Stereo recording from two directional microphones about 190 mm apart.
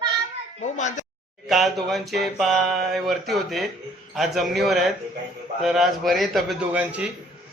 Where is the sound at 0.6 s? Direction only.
40° left (ahead or behind).